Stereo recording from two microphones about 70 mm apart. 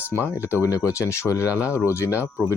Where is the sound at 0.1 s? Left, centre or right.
Left.